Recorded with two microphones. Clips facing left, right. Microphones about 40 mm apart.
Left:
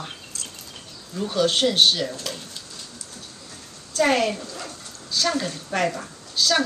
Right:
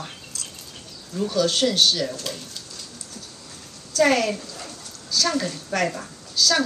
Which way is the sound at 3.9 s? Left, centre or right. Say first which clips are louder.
Right 1 dB; left.